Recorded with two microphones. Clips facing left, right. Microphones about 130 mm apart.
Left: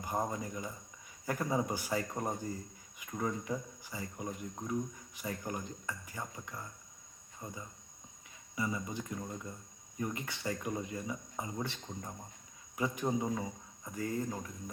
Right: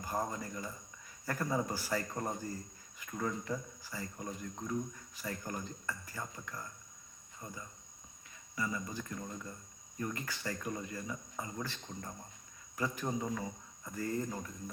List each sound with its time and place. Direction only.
0.0 s speech: 20° left (ahead or behind)
11.8 s speech: 10° left (ahead or behind)